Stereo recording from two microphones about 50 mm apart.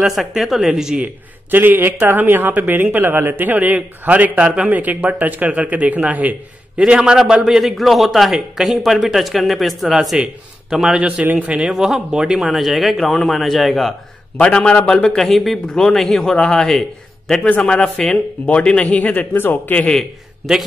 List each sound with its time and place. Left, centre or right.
0.0 s a man's voice: centre
0.9 s a man's voice: right
1.6 s a man's voice: right
6.9 s a man's voice: centre
7.6 s a man's voice: centre; by 11.7 s right
11.7 s a man's voice: centre
14.4 s a man's voice: left
15.2 s a man's voice: centre
15.6 s a man's voice: centre
18.9 s speech: left
19.3 s a man's voice: left